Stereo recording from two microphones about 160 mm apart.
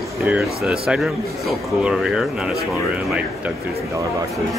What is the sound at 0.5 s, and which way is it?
Speech, 5° right (ahead or behind).